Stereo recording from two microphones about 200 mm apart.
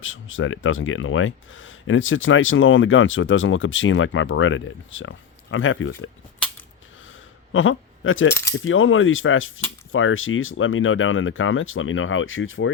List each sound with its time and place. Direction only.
0.0 s speech: 80° left
7.5 s speech: 80° left
8.3 s coin: 10° left (ahead or behind)
8.5 s speech: 80° left